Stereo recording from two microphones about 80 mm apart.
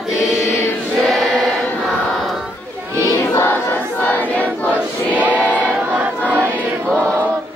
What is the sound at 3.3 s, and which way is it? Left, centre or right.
Choir, left.